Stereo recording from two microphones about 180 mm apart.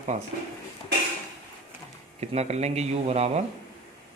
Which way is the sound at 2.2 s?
40° right (ahead or behind).